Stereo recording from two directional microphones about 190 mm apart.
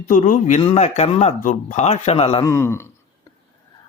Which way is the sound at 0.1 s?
40° left (ahead or behind).